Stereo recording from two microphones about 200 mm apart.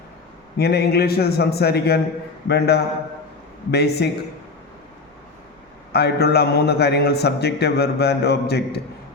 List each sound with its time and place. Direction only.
0.5 s a man's voice: 55° left (ahead or behind)
5.9 s a man's voice: 55° left (ahead or behind)